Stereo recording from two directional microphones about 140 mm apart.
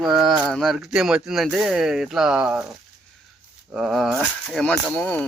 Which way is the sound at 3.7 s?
5° right (ahead or behind).